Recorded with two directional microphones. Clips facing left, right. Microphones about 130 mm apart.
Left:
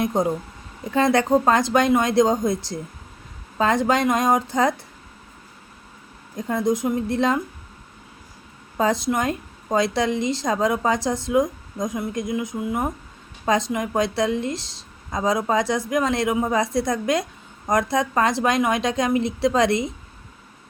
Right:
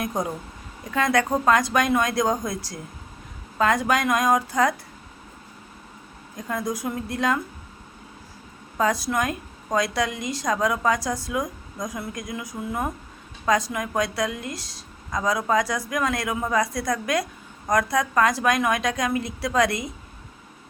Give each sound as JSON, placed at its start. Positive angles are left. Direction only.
{"t": 0.0, "sound": "a woman's voice", "side_deg": 25}
{"t": 6.3, "sound": "a woman's voice", "side_deg": 25}
{"t": 8.8, "sound": "a woman's voice", "side_deg": 25}